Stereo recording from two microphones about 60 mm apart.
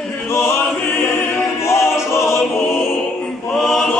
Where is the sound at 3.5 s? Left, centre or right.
Centre.